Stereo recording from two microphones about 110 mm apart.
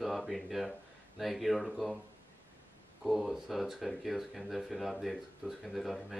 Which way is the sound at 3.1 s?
Centre (ahead or behind).